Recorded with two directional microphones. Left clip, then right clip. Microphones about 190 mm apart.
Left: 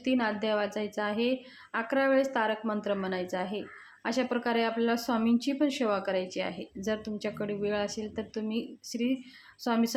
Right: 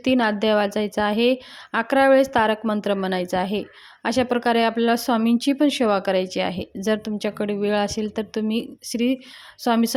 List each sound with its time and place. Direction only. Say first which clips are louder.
0.0 s speech: right 9 dB; 45° right (ahead or behind)